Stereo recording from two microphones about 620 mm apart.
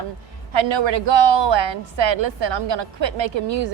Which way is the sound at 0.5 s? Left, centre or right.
Right.